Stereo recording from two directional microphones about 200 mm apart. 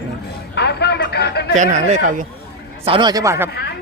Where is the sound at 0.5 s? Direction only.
55° left (ahead or behind).